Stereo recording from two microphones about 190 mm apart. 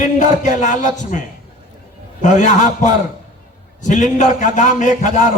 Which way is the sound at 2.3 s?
40° left (ahead or behind).